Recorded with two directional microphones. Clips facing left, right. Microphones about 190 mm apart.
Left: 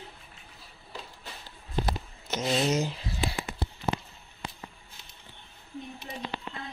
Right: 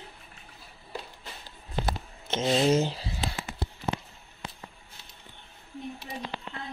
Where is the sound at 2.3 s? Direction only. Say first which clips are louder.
Right 4 dB; 30° right (ahead or behind).